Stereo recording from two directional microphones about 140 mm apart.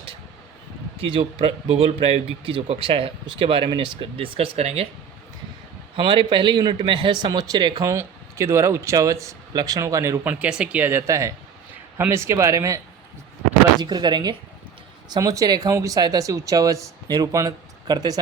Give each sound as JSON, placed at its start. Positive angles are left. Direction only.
{"t": 0.9, "sound": "speech", "side_deg": -40}
{"t": 6.0, "sound": "speech", "side_deg": -35}
{"t": 10.4, "sound": "speech", "side_deg": -10}